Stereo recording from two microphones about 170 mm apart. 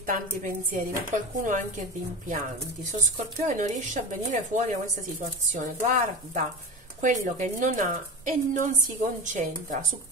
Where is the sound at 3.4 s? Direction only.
45° right (ahead or behind).